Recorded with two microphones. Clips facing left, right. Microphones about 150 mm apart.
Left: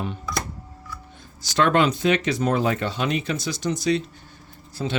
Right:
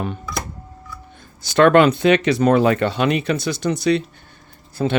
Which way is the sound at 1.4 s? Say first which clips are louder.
Right 7 dB; 60° right (ahead or behind).